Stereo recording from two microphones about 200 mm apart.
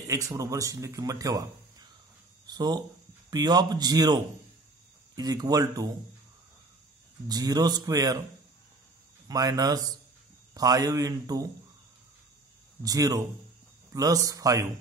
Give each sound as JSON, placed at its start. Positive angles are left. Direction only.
{"t": 0.0, "sound": "speech", "side_deg": -15}
{"t": 7.2, "sound": "speech", "side_deg": -20}
{"t": 9.3, "sound": "a man's voice", "side_deg": -20}
{"t": 12.8, "sound": "a man's voice", "side_deg": -15}